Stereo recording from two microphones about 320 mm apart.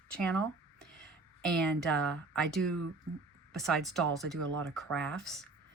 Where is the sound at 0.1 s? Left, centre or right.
Centre.